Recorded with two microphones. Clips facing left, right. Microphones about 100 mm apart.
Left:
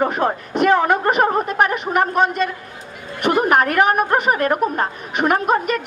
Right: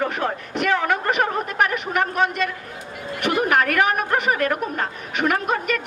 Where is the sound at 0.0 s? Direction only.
30° left (ahead or behind).